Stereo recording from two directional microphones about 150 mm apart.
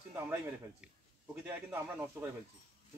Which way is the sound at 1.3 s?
15° right (ahead or behind).